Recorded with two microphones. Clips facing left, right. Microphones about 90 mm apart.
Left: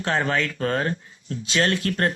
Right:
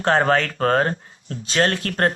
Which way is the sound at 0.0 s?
45° right (ahead or behind).